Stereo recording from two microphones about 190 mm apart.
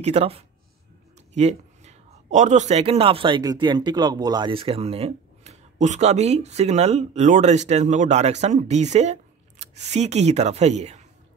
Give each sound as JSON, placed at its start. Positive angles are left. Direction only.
{"t": 0.0, "sound": "a man's voice", "side_deg": -35}